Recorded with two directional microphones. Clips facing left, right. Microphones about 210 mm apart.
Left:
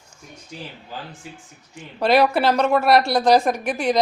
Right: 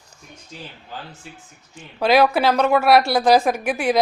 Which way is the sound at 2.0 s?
Centre (ahead or behind).